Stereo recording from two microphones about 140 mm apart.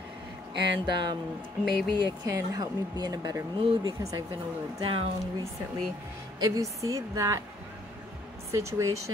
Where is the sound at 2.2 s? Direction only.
25° right (ahead or behind).